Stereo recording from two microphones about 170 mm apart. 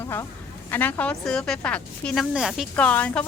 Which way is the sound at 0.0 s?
15° left (ahead or behind).